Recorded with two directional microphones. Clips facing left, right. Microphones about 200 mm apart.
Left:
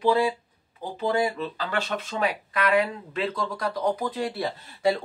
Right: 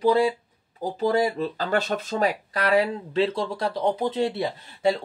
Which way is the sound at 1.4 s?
40° right (ahead or behind).